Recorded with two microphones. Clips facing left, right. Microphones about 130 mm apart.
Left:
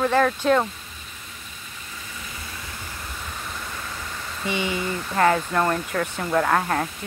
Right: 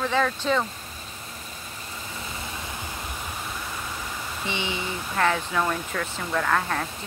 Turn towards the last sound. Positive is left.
turn(degrees=20)  # may be behind; listen again after turning